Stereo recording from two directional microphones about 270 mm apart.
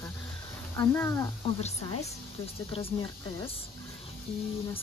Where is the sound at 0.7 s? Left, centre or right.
Centre.